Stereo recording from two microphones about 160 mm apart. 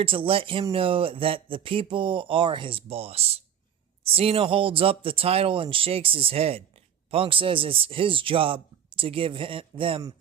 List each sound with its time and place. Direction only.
0.0 s speech: 35° right (ahead or behind)